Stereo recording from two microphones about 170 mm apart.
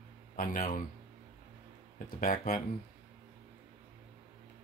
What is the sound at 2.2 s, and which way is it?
Speech, 55° left (ahead or behind).